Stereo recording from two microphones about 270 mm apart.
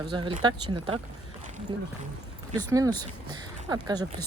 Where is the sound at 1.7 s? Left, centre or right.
Centre.